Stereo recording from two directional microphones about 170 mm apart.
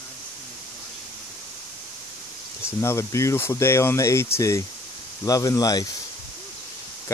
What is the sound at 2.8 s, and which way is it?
Speech, 15° left (ahead or behind).